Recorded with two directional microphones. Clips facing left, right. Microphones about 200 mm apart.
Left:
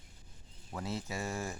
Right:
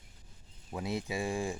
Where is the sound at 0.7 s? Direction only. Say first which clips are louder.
Right 4 dB; 15° right (ahead or behind).